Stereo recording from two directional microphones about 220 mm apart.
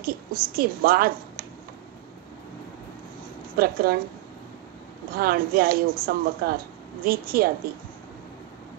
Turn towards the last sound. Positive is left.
turn(degrees=-40)  # may be behind; listen again after turning